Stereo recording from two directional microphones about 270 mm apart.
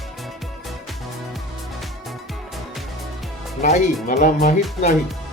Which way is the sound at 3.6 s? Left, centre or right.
Left.